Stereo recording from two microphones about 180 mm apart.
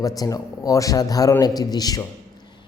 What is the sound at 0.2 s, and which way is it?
Speech, 20° left (ahead or behind).